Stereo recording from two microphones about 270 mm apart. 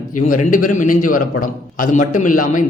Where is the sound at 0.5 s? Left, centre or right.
Left.